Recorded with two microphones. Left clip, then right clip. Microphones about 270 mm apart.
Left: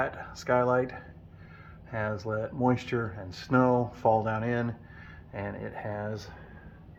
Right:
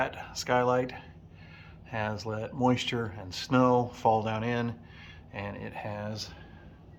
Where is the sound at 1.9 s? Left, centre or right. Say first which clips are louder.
Left 2 dB; centre.